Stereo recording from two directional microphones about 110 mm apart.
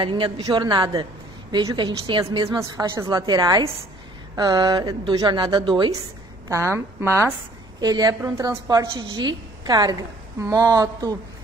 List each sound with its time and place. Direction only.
0.0 s a woman's voice: 45° right (ahead or behind)
6.5 s a woman's voice: 25° right (ahead or behind)
7.8 s a woman's voice: 35° right (ahead or behind)
8.9 s a woman's voice: 40° right (ahead or behind)